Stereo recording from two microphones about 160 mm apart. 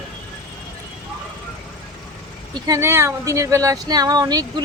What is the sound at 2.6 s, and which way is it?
Speech, 20° right (ahead or behind).